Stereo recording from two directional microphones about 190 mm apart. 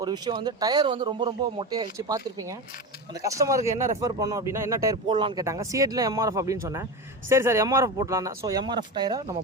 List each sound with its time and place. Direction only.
0.0 s speech: 25° right (ahead or behind)